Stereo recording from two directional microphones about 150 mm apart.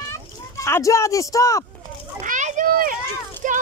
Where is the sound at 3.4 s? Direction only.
60° right (ahead or behind).